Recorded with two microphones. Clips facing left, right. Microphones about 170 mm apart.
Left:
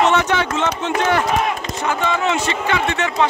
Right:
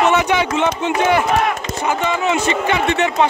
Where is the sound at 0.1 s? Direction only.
15° right (ahead or behind).